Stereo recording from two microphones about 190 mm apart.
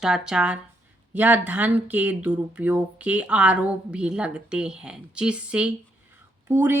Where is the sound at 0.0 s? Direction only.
5° right (ahead or behind).